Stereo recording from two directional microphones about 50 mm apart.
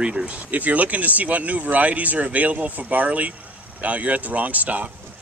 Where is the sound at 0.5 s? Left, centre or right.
Right.